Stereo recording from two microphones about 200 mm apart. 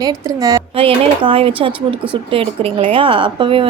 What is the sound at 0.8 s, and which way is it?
A woman's voice, 25° right (ahead or behind).